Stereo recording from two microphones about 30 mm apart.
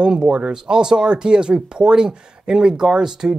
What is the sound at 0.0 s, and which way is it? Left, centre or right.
Speech, right.